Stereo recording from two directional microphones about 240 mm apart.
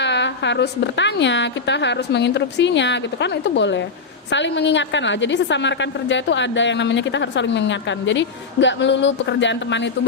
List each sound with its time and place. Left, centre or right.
0.0 s a woman's voice: left